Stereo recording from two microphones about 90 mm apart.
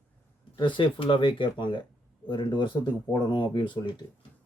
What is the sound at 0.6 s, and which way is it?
Speech, 65° left (ahead or behind).